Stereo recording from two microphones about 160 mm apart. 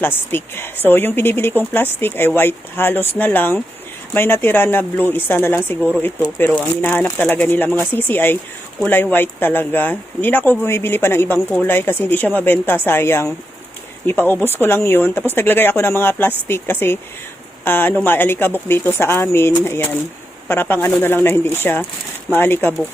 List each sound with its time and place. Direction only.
0.0 s a woman's voice: 15° left (ahead or behind)